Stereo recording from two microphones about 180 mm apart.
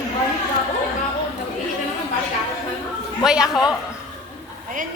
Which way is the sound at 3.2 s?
5° right (ahead or behind).